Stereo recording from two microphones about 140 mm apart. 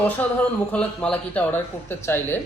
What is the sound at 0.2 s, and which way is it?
Speech, 10° left (ahead or behind).